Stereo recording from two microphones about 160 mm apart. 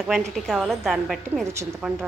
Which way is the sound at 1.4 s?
20° right (ahead or behind).